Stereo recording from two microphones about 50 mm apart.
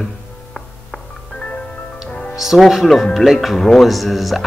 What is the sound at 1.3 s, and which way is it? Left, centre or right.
Music, left.